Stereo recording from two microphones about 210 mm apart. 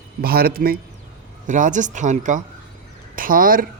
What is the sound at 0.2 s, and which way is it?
Speech, 45° right (ahead or behind).